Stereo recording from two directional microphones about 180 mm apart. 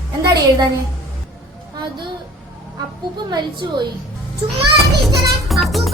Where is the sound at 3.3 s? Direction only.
25° right (ahead or behind).